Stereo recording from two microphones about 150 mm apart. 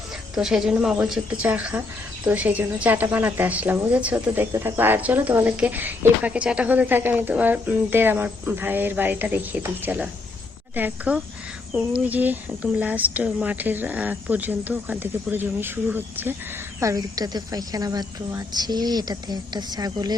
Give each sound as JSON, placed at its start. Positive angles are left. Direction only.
{"t": 0.3, "sound": "a woman's voice", "side_deg": -5}